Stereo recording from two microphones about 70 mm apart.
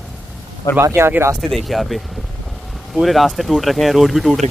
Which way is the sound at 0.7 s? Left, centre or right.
Left.